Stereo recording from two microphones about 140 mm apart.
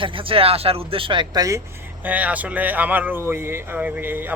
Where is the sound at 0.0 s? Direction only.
40° right (ahead or behind).